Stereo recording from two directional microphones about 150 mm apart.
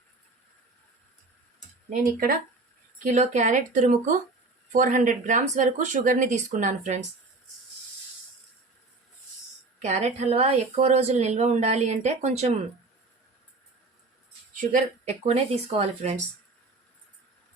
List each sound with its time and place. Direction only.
1.9 s speech: 70° right (ahead or behind)
3.0 s speech: 55° right (ahead or behind)
9.8 s a woman's voice: 50° right (ahead or behind)
14.5 s a woman's voice: 60° right (ahead or behind)